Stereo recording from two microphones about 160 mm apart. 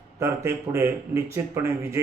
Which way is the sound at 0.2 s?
15° right (ahead or behind).